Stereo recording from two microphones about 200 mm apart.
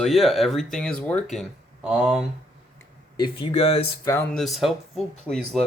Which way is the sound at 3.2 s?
30° left (ahead or behind).